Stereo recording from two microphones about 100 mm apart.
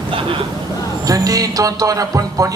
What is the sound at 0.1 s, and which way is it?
Vehicle, 65° right (ahead or behind).